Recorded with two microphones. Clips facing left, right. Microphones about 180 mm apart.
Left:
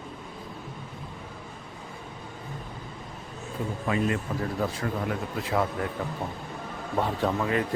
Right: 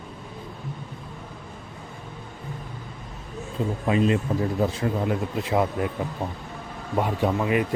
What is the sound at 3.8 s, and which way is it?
Speech, 20° right (ahead or behind).